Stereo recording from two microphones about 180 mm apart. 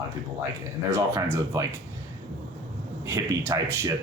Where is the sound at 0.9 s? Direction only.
15° right (ahead or behind).